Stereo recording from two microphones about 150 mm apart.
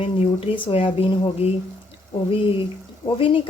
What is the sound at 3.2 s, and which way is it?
Speech, 35° left (ahead or behind).